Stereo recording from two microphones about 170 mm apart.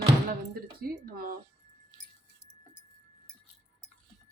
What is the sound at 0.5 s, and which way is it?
Speech, 60° right (ahead or behind).